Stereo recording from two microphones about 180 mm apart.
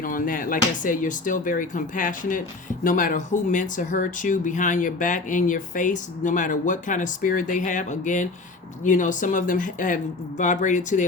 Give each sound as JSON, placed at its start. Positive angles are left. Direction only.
{"t": 0.0, "sound": "speech", "side_deg": 50}